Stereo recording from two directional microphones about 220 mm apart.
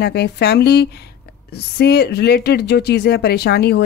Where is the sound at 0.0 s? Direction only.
45° left (ahead or behind).